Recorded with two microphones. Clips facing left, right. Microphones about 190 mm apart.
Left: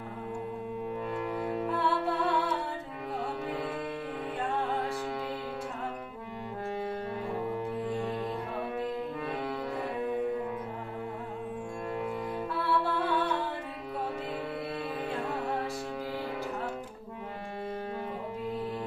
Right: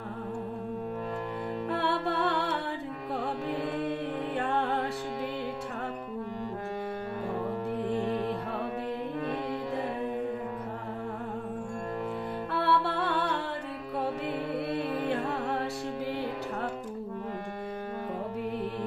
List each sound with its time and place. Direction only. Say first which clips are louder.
1.8 s music: right 2 dB; 70° right (ahead or behind)
12.5 s music: right 3 dB; 70° right (ahead or behind)